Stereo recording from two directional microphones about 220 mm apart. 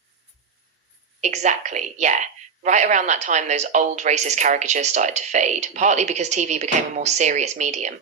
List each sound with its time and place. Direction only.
1.2 s a woman's voice: 30° right (ahead or behind)